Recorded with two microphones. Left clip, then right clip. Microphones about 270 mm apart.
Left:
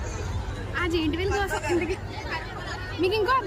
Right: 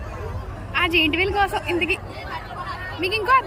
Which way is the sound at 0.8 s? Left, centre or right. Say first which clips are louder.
Right 8 dB; centre.